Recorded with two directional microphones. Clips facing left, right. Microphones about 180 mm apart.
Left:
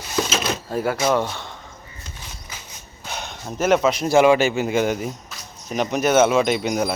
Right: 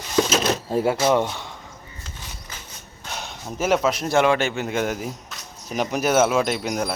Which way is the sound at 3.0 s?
Centre (ahead or behind).